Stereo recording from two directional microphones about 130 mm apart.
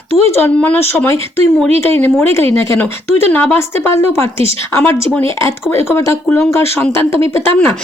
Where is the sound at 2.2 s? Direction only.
15° left (ahead or behind).